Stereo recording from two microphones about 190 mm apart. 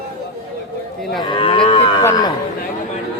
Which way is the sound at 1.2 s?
25° left (ahead or behind).